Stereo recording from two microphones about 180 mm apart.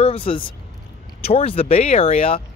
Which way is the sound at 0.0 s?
30° left (ahead or behind).